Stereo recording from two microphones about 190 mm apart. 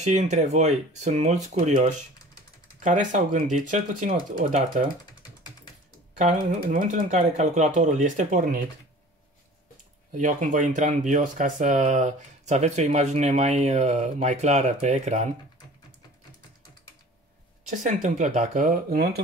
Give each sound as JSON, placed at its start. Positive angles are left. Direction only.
{"t": 0.0, "sound": "speech", "side_deg": -35}
{"t": 6.1, "sound": "speech", "side_deg": -40}
{"t": 10.1, "sound": "speech", "side_deg": -40}
{"t": 17.6, "sound": "speech", "side_deg": -40}